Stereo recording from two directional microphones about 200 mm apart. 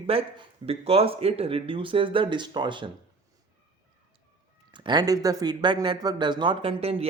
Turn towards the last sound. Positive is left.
turn(degrees=-30)  # may be behind; listen again after turning